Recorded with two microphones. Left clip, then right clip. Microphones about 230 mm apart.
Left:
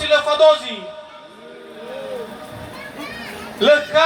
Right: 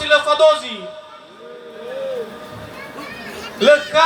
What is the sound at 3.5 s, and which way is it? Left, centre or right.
Speech, right.